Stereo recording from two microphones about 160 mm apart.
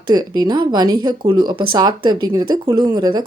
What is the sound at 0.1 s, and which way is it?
Speech, 25° right (ahead or behind).